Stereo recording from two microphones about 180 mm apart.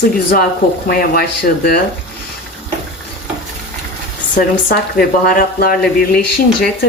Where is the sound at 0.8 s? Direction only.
55° left (ahead or behind).